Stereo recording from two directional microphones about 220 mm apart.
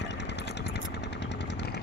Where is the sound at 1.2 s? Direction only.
50° left (ahead or behind).